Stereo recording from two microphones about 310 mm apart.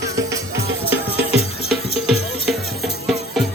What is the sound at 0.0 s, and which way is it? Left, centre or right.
Music, centre.